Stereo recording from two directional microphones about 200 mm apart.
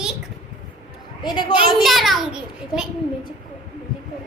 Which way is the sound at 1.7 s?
Centre (ahead or behind).